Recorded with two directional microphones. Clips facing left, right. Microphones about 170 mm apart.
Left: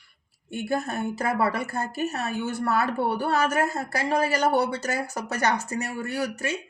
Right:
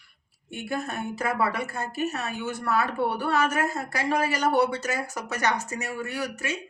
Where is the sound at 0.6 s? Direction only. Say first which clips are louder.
Left 3 dB; 35° left (ahead or behind).